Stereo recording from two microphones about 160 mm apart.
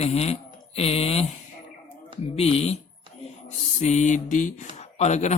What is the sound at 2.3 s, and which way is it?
Speech, 40° left (ahead or behind).